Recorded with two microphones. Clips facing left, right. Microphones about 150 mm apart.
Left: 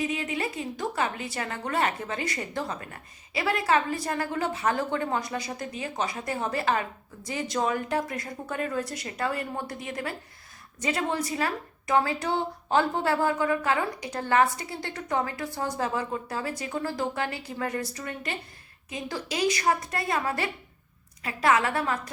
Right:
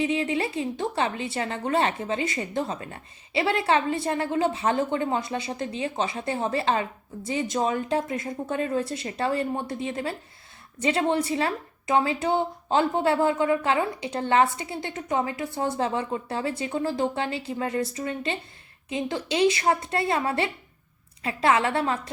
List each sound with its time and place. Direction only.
0.0 s a woman's voice: 30° right (ahead or behind)